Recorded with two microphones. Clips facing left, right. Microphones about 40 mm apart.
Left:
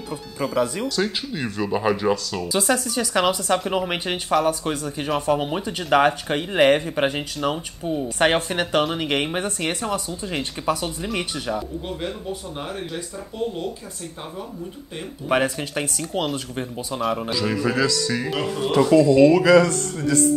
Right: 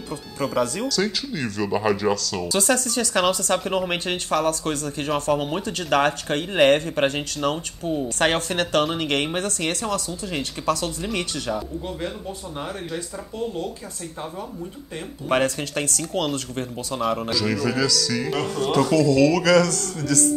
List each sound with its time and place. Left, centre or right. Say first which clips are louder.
0.1 s speech: even; centre
0.8 s a man's voice: even; left
3.5 s speech: left 1 dB; centre
8.2 s a man's voice: left 3 dB; centre
15.4 s speech: even; centre
17.3 s a man's voice: even; left